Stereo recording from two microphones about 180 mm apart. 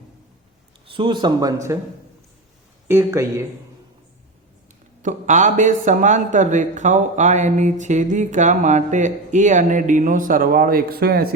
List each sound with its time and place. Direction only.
0.9 s speech: 30° right (ahead or behind)
2.8 s speech: 15° right (ahead or behind)
5.0 s speech: 45° right (ahead or behind)